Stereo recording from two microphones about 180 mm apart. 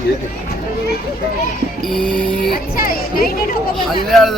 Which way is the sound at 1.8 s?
5° left (ahead or behind).